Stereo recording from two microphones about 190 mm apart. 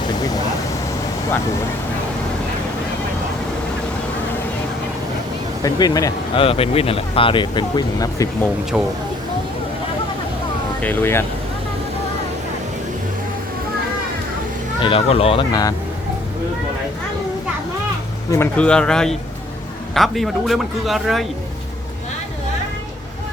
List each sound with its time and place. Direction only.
5.6 s speech: 20° left (ahead or behind)
6.4 s speech: 30° left (ahead or behind)
8.7 s a man's voice: 5° right (ahead or behind)
10.8 s speech: 10° left (ahead or behind)
14.8 s speech: 30° left (ahead or behind)
18.3 s a man's voice: 10° left (ahead or behind)